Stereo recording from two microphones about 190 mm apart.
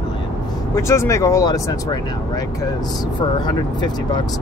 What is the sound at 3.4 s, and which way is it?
Speech, 20° left (ahead or behind).